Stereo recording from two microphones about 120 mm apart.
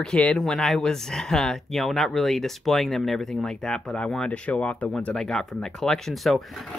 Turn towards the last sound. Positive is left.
turn(degrees=0)  # may be behind; listen again after turning